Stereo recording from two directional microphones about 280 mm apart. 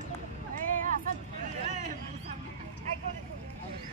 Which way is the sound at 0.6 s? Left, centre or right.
Right.